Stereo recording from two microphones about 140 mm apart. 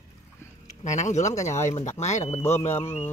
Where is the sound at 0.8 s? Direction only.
60° left (ahead or behind).